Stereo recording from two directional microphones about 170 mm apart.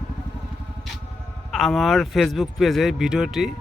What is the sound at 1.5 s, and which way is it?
A man's voice, centre (ahead or behind).